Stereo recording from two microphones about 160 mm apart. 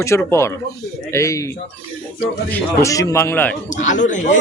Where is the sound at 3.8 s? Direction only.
50° left (ahead or behind).